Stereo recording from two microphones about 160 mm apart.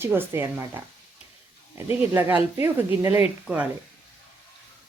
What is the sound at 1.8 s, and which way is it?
Speech, 15° right (ahead or behind).